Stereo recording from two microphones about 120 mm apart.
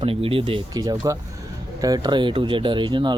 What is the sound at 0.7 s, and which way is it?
Speech, 30° right (ahead or behind).